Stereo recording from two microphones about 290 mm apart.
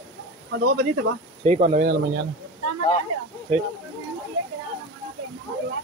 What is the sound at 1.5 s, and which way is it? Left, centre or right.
Speech, right.